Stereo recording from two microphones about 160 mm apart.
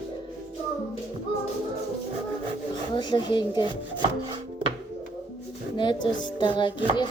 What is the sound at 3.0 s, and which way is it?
Speech, 25° left (ahead or behind).